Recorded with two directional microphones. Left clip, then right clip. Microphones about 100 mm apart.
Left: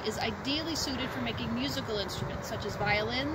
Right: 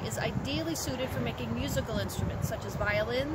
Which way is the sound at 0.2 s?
35° right (ahead or behind).